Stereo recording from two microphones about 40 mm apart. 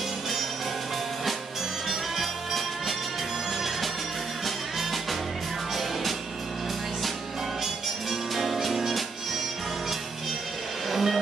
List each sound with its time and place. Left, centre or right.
1.9 s music: centre
7.6 s music: centre
10.9 s music: centre